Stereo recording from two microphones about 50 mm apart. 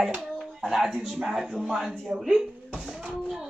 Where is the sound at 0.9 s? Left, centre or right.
Centre.